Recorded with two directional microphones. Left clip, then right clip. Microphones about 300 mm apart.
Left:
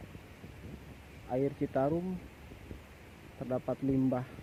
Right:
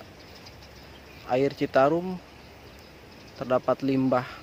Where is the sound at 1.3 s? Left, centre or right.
Centre.